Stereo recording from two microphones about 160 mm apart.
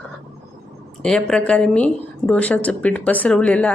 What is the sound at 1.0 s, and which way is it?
A woman's voice, 5° left (ahead or behind).